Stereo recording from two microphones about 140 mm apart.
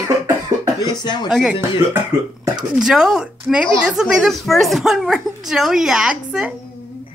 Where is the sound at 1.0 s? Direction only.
30° left (ahead or behind).